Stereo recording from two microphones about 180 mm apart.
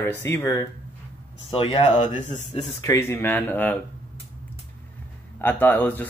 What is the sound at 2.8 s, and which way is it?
Speech, 15° left (ahead or behind).